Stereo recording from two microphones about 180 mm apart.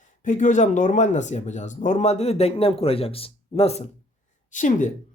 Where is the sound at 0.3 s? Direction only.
45° left (ahead or behind).